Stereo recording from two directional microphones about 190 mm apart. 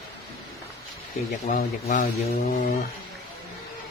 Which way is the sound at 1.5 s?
45° left (ahead or behind).